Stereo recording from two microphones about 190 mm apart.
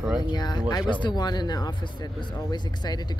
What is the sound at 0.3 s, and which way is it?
Speech, 20° left (ahead or behind).